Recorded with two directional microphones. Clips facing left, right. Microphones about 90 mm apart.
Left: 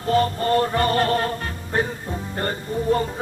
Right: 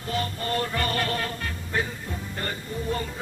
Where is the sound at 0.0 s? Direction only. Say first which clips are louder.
Left 10 dB; 40° left (ahead or behind).